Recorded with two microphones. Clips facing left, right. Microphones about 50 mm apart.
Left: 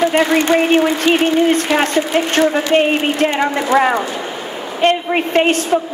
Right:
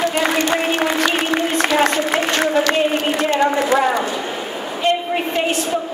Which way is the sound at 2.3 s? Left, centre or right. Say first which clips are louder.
Left 5 dB; left.